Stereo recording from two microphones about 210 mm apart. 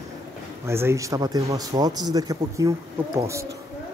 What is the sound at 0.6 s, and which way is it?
Speech, 10° right (ahead or behind).